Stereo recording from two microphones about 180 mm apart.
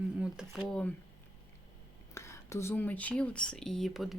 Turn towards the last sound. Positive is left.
turn(degrees=0)  # may be behind; listen again after turning